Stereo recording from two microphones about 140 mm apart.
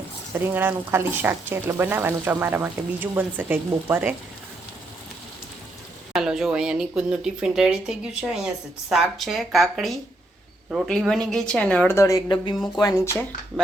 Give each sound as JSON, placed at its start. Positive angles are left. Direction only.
{"t": 0.3, "sound": "speech", "side_deg": -15}
{"t": 6.1, "sound": "speech", "side_deg": -5}
{"t": 11.9, "sound": "speech", "side_deg": 20}